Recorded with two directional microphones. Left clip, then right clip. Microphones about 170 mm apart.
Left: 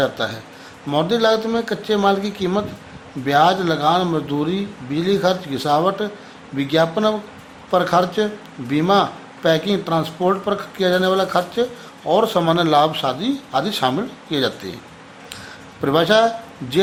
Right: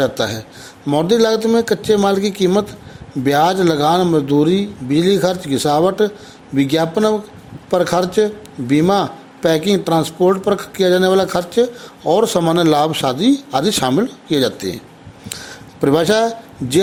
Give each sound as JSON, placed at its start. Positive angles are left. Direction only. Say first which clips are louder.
{"t": 0.0, "sound": "speech", "louder": "right 3 dB", "side_deg": -50}
{"t": 15.8, "sound": "a man's voice", "louder": "right 1 dB", "side_deg": -45}